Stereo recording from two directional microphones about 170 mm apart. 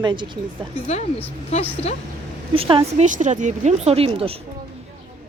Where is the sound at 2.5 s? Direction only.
30° right (ahead or behind).